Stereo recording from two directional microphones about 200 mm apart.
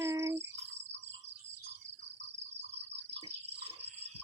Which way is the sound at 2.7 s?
60° right (ahead or behind).